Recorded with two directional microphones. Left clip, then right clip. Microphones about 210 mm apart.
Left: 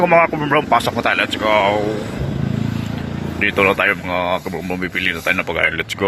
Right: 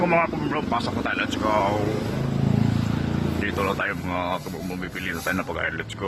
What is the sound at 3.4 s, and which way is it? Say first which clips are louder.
Speech: left 12 dB; 15° left (ahead or behind).